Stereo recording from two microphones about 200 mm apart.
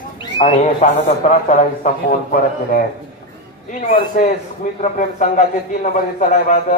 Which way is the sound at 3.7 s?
40° left (ahead or behind).